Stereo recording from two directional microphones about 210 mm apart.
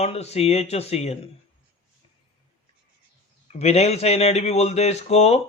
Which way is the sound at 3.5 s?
30° left (ahead or behind).